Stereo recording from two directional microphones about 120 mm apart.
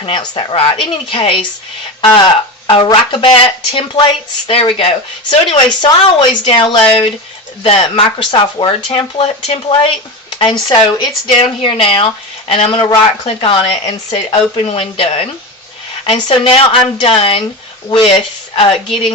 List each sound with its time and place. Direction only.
0.0 s speech: 40° left (ahead or behind)
10.3 s speech: 40° left (ahead or behind)
11.3 s speech: 50° left (ahead or behind)
14.3 s speech: 50° left (ahead or behind)